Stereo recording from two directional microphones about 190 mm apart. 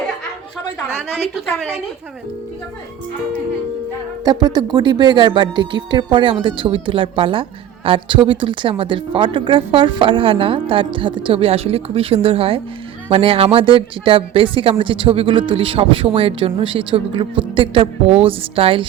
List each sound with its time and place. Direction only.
4.2 s speech: 20° right (ahead or behind)